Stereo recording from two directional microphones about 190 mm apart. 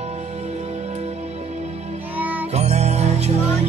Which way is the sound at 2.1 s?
10° right (ahead or behind).